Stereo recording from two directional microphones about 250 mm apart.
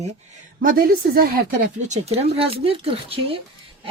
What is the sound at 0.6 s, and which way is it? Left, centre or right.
Speech, right.